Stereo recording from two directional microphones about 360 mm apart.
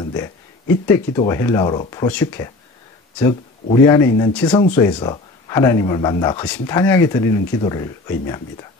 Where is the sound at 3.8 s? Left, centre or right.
Centre.